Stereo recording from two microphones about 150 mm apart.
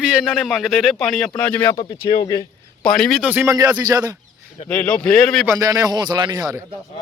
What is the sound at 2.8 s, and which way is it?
Speech, 5° left (ahead or behind).